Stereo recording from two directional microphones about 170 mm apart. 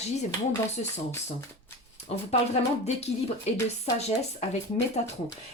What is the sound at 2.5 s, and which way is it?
Speech, 40° left (ahead or behind).